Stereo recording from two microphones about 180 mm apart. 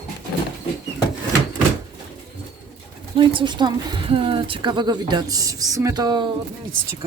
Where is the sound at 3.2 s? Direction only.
25° right (ahead or behind).